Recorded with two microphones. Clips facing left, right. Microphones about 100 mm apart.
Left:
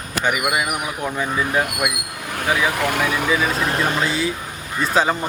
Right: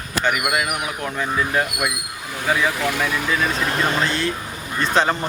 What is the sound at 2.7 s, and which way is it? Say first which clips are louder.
Speech: left 2 dB; 55° left (ahead or behind).